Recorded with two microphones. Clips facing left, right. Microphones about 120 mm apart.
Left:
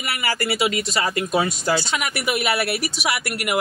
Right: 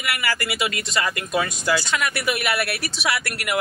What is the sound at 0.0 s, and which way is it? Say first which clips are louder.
A man's voice: left 1 dB; 25° left (ahead or behind).